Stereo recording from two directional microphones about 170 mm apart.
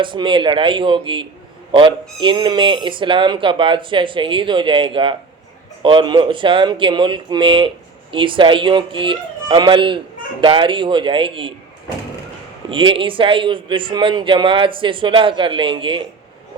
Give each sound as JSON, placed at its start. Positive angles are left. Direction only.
{"t": 0.0, "sound": "speech", "side_deg": -30}
{"t": 12.6, "sound": "speech", "side_deg": -30}